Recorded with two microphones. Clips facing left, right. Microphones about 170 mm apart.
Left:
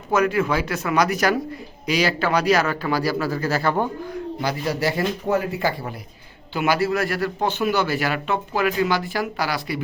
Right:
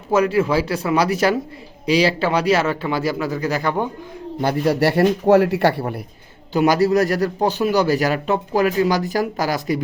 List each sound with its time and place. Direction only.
0.1 s a man's voice: 30° right (ahead or behind)
4.6 s speech: 65° right (ahead or behind)
6.5 s a man's voice: 40° right (ahead or behind)